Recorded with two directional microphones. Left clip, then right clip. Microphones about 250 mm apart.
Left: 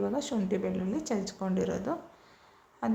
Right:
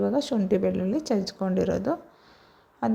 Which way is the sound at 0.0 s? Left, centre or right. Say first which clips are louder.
Right 6 dB; right.